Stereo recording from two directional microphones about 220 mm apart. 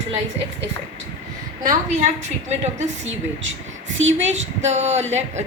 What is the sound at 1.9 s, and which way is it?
A woman's voice, 35° right (ahead or behind).